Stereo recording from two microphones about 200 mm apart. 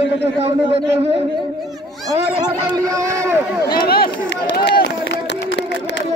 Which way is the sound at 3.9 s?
50° left (ahead or behind).